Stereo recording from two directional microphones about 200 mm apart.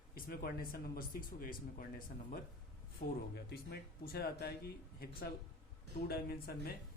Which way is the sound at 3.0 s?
40° left (ahead or behind).